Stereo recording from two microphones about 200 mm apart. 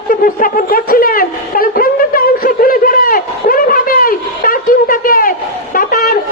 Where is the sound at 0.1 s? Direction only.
45° left (ahead or behind).